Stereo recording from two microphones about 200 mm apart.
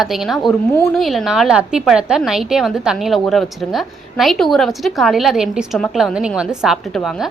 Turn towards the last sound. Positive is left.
turn(degrees=0)  # may be behind; listen again after turning